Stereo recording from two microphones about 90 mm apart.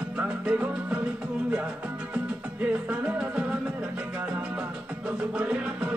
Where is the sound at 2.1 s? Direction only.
15° right (ahead or behind).